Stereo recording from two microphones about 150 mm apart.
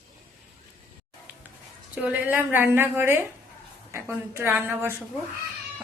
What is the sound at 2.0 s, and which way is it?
A woman's voice, 10° right (ahead or behind).